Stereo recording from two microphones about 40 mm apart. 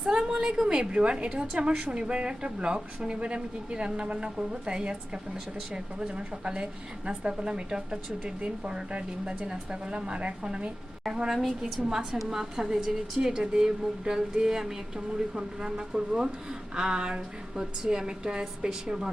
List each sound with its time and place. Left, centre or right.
0.0 s a sound: centre
1.5 s a woman's voice: right
11.3 s a woman's voice: centre